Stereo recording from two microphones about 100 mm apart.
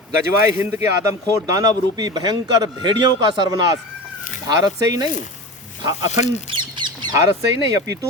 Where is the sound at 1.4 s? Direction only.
40° right (ahead or behind).